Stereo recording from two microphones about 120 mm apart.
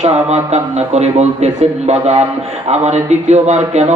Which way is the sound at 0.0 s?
70° right (ahead or behind).